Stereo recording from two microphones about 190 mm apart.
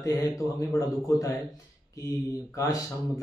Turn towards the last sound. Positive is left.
turn(degrees=20)  # may be behind; listen again after turning